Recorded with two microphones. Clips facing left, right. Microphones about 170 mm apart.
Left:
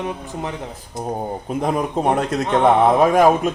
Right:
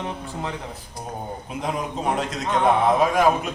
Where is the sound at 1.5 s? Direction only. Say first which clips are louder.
Left 7 dB; 55° left (ahead or behind).